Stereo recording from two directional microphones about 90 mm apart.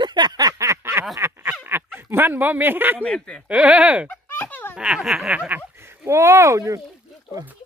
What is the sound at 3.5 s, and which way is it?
Speech, 15° right (ahead or behind).